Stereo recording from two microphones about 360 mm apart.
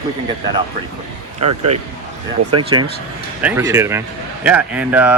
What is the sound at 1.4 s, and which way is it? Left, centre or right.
Speech, right.